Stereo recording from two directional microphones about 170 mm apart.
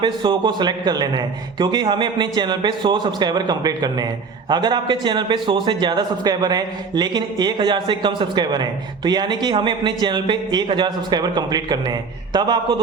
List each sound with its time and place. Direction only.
0.0 s a man's voice: 30° right (ahead or behind)